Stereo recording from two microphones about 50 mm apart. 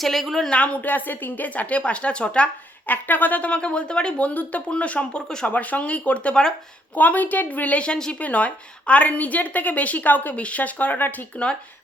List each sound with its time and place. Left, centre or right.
0.0 s speech: centre
0.5 s a woman's voice: left
2.8 s a woman's voice: left; by 6.5 s centre
6.9 s a woman's voice: left
7.9 s speech: centre
8.2 s a woman's voice: left